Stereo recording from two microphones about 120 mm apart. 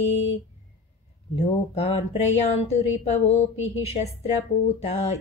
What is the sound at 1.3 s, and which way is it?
Speech, 65° left (ahead or behind).